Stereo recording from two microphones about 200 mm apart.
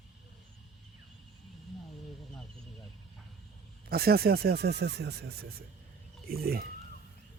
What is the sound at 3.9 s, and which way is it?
Speech, 50° right (ahead or behind).